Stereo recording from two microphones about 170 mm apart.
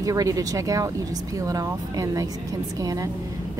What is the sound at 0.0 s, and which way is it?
A woman's voice, 20° right (ahead or behind).